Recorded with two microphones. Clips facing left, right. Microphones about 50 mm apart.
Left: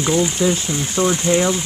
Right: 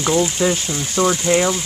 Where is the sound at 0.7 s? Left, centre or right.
Left.